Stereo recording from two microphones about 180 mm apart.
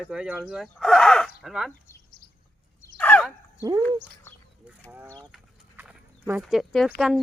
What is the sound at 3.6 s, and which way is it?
Speech, 20° right (ahead or behind).